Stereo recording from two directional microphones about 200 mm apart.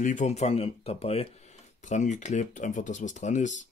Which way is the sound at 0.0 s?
40° left (ahead or behind).